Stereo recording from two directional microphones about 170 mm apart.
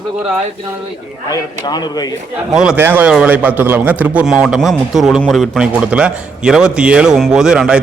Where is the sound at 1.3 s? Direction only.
20° left (ahead or behind).